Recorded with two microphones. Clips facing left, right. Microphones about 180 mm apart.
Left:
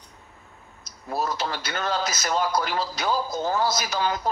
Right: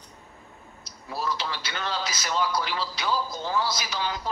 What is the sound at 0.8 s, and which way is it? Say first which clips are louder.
A man's voice: left 3 dB; 45° left (ahead or behind).